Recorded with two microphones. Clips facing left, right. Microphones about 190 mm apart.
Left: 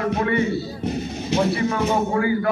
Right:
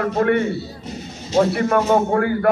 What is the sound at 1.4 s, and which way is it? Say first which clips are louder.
A man's voice: right 5 dB; 60° right (ahead or behind).